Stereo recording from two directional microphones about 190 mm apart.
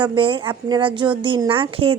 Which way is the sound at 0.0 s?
25° right (ahead or behind).